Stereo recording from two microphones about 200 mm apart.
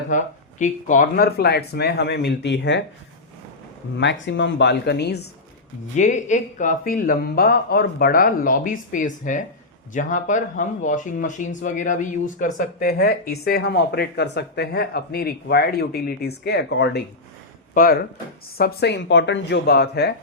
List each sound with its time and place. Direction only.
0.1 s speech: 40° left (ahead or behind); by 2.8 s 60° left (ahead or behind)
3.9 s speech: 65° left (ahead or behind)
6.0 s speech: 35° left (ahead or behind); by 17.0 s 55° left (ahead or behind)
17.7 s speech: 40° left (ahead or behind)